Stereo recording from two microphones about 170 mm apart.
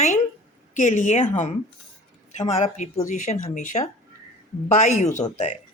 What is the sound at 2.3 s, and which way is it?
Speech, 45° left (ahead or behind).